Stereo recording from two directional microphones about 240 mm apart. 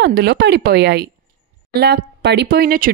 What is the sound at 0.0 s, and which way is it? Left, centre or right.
A woman's voice, right.